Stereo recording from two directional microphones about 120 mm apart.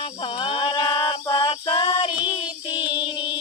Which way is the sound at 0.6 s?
45° left (ahead or behind).